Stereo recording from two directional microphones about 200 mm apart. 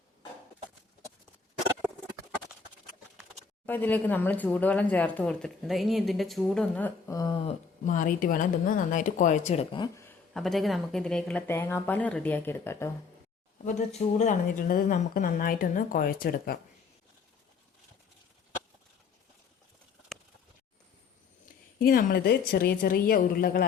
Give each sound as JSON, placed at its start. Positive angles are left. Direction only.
{"t": 3.7, "sound": "speech", "side_deg": 10}
{"t": 7.4, "sound": "speech", "side_deg": 40}
{"t": 10.3, "sound": "speech", "side_deg": 0}
{"t": 13.7, "sound": "speech", "side_deg": 35}
{"t": 21.4, "sound": "speech", "side_deg": 45}